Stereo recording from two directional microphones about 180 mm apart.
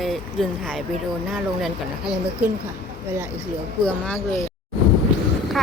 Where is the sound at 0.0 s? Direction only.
Centre (ahead or behind).